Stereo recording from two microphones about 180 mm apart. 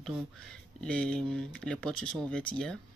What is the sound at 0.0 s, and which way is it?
Speech, 5° left (ahead or behind).